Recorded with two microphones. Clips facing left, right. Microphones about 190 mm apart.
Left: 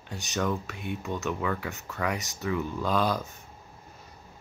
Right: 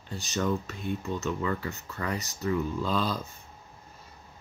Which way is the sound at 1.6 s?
90° left.